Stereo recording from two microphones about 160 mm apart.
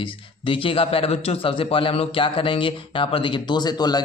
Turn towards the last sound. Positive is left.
turn(degrees=25)  # may be behind; listen again after turning